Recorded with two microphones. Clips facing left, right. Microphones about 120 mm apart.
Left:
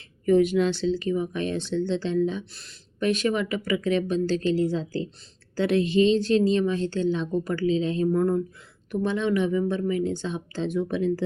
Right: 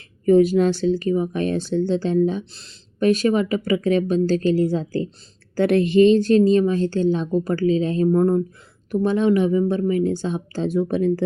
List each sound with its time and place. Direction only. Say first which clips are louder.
0.3 s a woman's voice: right 5 dB; 40° right (ahead or behind)
2.4 s speech: right 4 dB; 25° right (ahead or behind)
3.0 s a woman's voice: right 6 dB; 40° right (ahead or behind)